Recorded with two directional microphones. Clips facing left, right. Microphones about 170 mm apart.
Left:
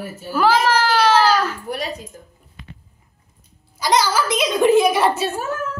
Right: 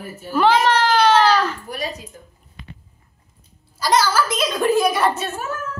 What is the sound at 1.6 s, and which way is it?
Speech, 60° left (ahead or behind).